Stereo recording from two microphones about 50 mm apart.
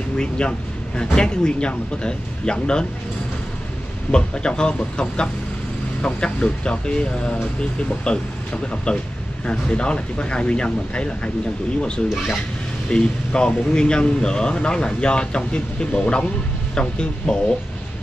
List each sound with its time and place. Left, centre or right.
0.2 s speech: centre
4.1 s speech: centre
12.9 s speech: centre